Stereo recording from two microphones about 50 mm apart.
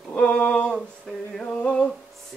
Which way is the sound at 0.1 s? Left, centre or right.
Left.